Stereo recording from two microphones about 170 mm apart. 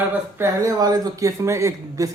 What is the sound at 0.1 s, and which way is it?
Speech, 15° right (ahead or behind).